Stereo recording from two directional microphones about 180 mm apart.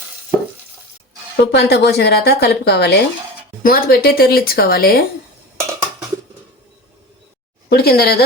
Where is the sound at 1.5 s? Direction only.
65° left (ahead or behind).